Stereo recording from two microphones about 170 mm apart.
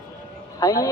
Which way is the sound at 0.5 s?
20° left (ahead or behind).